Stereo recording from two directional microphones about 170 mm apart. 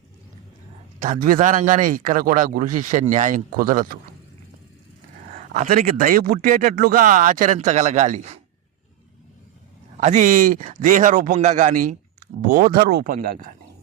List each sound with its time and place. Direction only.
0.9 s a man's voice: 50° right (ahead or behind)
5.3 s a man's voice: 45° right (ahead or behind)
10.0 s a man's voice: 45° right (ahead or behind)